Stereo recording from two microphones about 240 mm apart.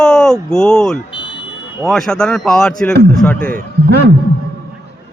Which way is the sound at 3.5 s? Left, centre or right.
Right.